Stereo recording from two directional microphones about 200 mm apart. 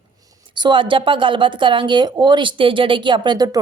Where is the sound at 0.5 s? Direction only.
25° right (ahead or behind).